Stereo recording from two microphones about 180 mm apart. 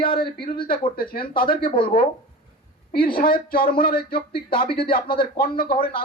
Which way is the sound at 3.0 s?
55° left (ahead or behind).